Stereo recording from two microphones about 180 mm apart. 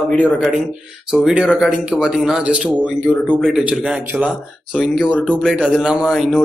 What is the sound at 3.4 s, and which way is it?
Speech, 5° right (ahead or behind).